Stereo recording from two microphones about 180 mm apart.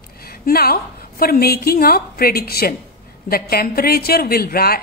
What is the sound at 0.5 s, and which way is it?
A woman's voice, 55° left (ahead or behind).